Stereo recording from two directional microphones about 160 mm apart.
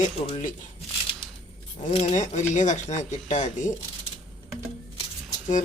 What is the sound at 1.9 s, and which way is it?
Speech, 50° left (ahead or behind).